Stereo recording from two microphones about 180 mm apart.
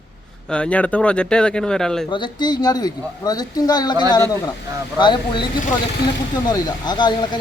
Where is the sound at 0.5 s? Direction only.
5° left (ahead or behind).